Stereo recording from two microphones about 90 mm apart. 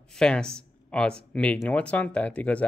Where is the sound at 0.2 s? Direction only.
10° left (ahead or behind).